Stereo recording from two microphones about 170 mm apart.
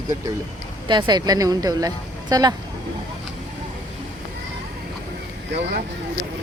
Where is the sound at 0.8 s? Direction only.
25° right (ahead or behind).